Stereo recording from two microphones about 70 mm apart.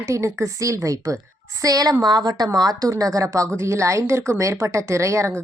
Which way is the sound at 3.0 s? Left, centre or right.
Right.